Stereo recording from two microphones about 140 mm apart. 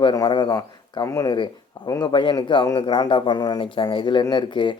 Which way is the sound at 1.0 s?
20° left (ahead or behind).